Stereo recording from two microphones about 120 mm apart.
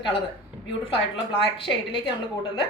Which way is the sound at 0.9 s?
45° left (ahead or behind).